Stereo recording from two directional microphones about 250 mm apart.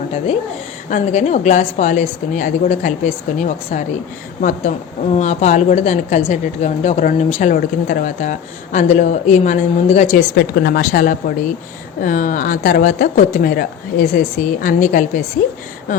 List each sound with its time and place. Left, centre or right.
0.9 s a woman's voice: left
10.3 s speech: left